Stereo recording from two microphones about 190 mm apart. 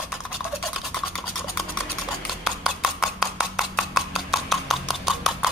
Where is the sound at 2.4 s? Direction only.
Centre (ahead or behind).